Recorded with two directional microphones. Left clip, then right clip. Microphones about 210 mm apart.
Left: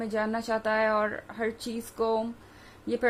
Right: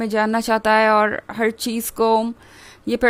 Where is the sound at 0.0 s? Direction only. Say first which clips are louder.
Right 10 dB; 50° right (ahead or behind).